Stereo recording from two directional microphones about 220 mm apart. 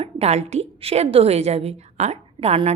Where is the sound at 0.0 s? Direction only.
30° right (ahead or behind).